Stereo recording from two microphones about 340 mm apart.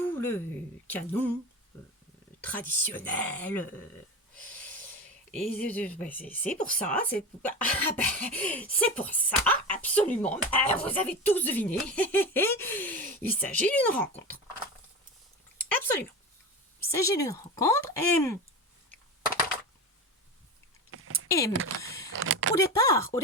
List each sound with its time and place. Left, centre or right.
0.0 s a sound: centre
0.9 s speech: centre
2.4 s speech: centre
5.3 s speech: centre
15.5 s a sound: centre
16.9 s speech: centre
21.2 s speech: centre
22.1 s speech: right
22.5 s speech: centre